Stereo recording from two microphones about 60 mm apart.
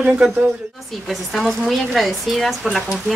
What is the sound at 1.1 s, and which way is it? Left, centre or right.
Speech, centre.